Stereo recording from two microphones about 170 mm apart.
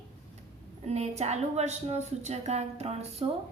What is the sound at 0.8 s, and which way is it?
A woman's voice, 40° right (ahead or behind).